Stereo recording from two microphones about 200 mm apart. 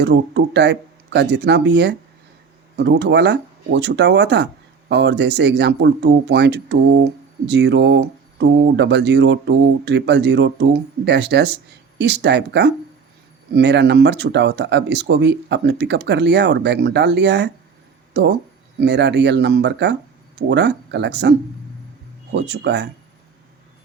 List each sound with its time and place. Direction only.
0.0 s speech: 60° right (ahead or behind)